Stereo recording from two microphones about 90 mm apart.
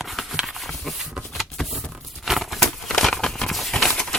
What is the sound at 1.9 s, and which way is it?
Crumpling, centre (ahead or behind).